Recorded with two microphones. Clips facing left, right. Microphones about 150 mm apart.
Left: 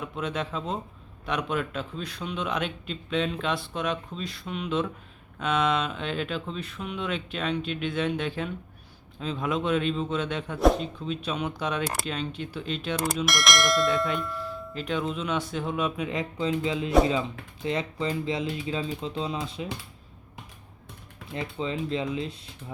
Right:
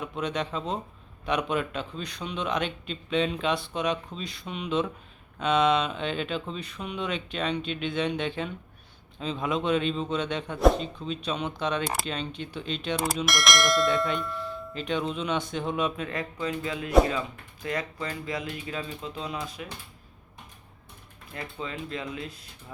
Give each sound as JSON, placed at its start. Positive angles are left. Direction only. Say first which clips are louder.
{"t": 0.0, "sound": "speech", "louder": "right 1 dB", "side_deg": 5}
{"t": 16.0, "sound": "speech", "louder": "left 3 dB", "side_deg": 20}
{"t": 21.3, "sound": "speech", "louder": "left 5 dB", "side_deg": 25}